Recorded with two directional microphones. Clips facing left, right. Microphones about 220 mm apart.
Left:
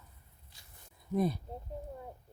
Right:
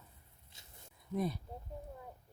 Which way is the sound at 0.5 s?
25° right (ahead or behind).